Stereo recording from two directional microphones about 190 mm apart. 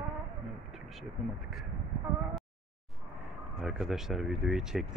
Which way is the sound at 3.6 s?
Centre (ahead or behind).